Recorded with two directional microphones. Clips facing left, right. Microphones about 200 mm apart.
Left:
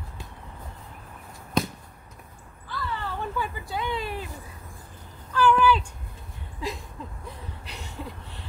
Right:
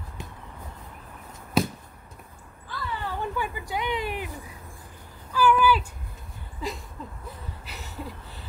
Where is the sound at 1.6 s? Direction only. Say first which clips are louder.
Right 2 dB; 5° right (ahead or behind).